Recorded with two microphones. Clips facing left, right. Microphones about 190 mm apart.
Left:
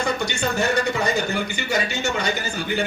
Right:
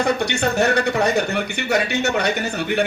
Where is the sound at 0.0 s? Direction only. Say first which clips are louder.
Right 4 dB; 65° right (ahead or behind).